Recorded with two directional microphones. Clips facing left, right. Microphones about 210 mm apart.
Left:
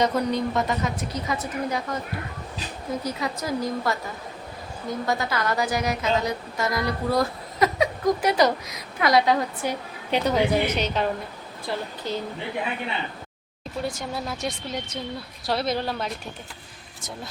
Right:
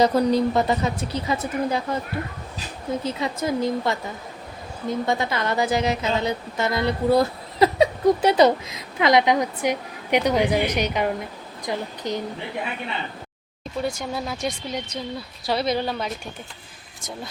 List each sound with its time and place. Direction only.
0.0 s speech: 35° right (ahead or behind)
3.0 s a woman's voice: 25° right (ahead or behind)
13.8 s speech: centre (ahead or behind)